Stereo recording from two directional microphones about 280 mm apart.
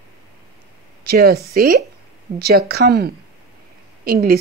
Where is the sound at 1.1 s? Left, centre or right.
Right.